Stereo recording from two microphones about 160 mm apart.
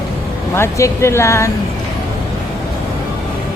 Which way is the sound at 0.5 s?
15° left (ahead or behind).